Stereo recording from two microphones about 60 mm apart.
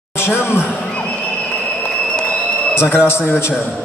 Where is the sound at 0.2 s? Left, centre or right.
Left.